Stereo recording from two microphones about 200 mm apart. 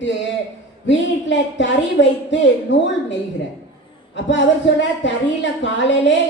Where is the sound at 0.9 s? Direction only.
65° left (ahead or behind).